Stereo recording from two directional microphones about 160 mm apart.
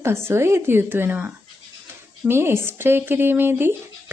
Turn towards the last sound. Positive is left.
turn(degrees=-15)  # may be behind; listen again after turning